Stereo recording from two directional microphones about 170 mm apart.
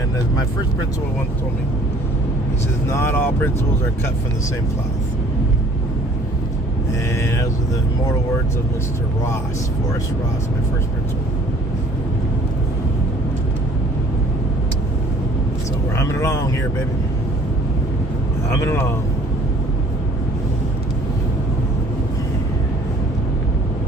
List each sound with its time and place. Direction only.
2.9 s speech: 15° left (ahead or behind)
16.0 s speech: 15° left (ahead or behind)
18.6 s speech: 15° left (ahead or behind)